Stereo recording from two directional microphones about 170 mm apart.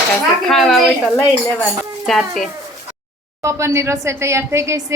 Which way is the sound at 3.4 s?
15° right (ahead or behind).